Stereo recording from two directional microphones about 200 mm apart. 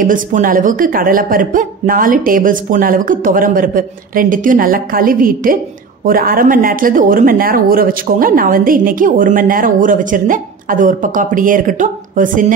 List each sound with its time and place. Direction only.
0.0 s speech: 40° right (ahead or behind)